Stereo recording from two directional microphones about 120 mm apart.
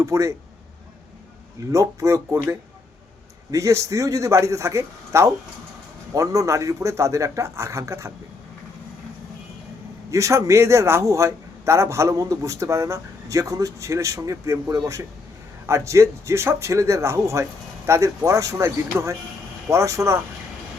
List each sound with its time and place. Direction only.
0.0 s a man's voice: 25° right (ahead or behind)
1.7 s a man's voice: 25° right (ahead or behind)
10.1 s a man's voice: 25° right (ahead or behind)